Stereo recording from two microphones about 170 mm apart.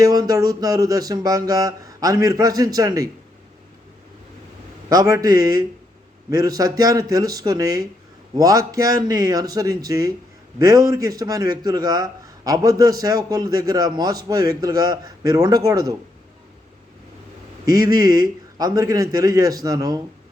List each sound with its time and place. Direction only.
0.0 s a man's voice: 20° right (ahead or behind)
4.9 s a man's voice: 20° right (ahead or behind)
17.7 s a man's voice: 20° right (ahead or behind)